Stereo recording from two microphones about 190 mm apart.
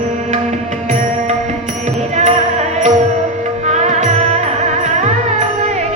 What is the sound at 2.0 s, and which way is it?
Music, 35° right (ahead or behind).